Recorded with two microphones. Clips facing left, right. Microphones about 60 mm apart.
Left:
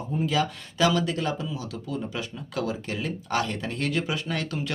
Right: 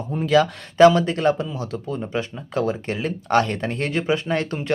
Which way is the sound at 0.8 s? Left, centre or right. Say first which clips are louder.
Right 10 dB; right.